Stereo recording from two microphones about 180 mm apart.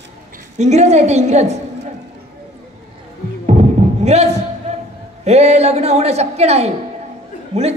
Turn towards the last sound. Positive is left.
turn(degrees=-35)  # may be behind; listen again after turning